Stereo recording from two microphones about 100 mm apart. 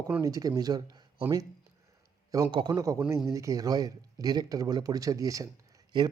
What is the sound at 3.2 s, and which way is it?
Speech, 35° right (ahead or behind).